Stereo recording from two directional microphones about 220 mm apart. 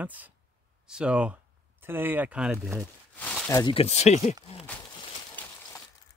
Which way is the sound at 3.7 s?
30° left (ahead or behind).